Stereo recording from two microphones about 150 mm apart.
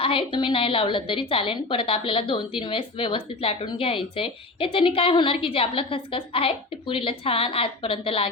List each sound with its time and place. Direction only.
0.0 s a woman's voice: 35° left (ahead or behind)